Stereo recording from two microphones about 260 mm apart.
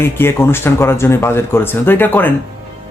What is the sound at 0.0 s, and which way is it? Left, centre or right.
A man's voice, centre.